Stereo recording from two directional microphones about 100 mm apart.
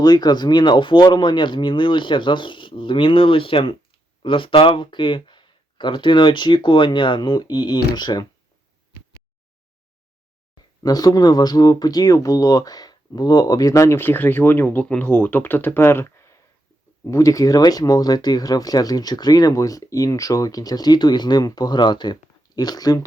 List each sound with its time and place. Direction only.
0.0 s speech: 45° left (ahead or behind)
10.8 s speech: 40° left (ahead or behind)